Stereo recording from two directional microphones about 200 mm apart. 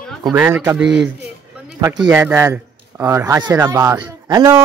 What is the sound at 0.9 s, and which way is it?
Speech, 60° right (ahead or behind).